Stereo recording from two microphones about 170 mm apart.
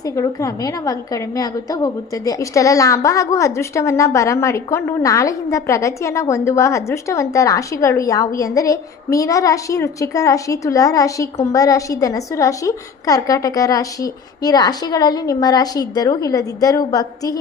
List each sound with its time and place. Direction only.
0.0 s a woman's voice: 20° left (ahead or behind)